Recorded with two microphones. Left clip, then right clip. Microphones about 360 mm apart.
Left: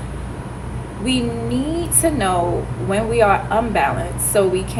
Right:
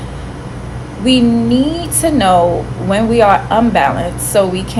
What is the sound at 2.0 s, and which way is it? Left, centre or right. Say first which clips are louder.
A woman's voice: right 9 dB; right.